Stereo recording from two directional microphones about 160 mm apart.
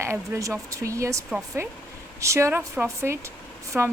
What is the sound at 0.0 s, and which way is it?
Speech, 15° right (ahead or behind).